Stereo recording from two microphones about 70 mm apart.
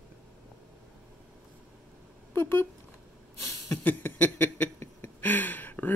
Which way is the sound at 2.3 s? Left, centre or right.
Left.